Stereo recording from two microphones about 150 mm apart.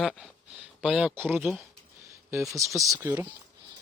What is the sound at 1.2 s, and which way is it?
Speech, 10° right (ahead or behind).